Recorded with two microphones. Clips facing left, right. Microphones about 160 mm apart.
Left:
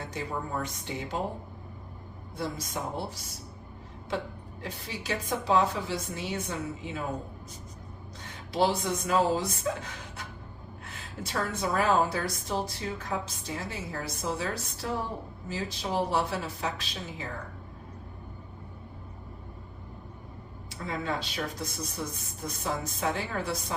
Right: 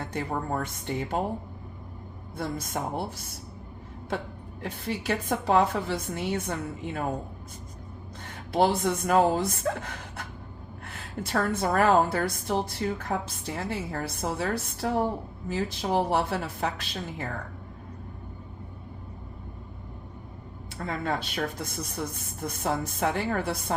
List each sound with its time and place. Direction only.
0.0 s speech: 55° right (ahead or behind)
4.6 s a woman's voice: 60° right (ahead or behind)
8.5 s a woman's voice: 55° right (ahead or behind)
20.7 s a woman's voice: 55° right (ahead or behind)